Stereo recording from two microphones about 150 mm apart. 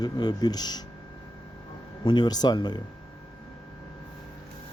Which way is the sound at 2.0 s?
30° left (ahead or behind).